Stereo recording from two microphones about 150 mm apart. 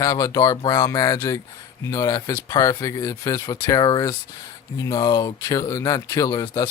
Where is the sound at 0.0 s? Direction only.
20° left (ahead or behind).